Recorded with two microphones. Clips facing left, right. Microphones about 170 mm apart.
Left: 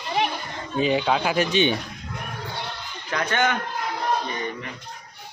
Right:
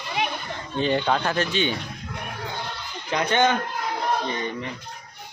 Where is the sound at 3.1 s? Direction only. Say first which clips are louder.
Right 3 dB; 20° right (ahead or behind).